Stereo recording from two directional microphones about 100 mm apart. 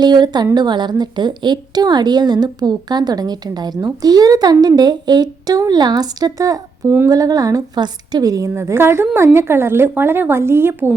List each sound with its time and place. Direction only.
0.0 s a woman's voice: 45° right (ahead or behind); by 10.9 s 20° right (ahead or behind)